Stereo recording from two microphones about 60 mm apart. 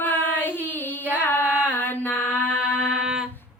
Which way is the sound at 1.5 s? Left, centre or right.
Left.